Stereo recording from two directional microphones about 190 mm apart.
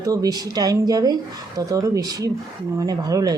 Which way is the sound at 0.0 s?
20° right (ahead or behind).